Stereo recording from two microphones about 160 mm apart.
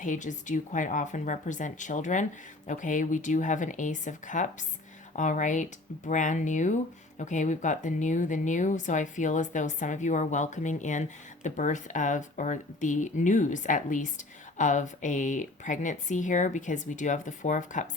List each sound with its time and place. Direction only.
0.0 s speech: 50° left (ahead or behind)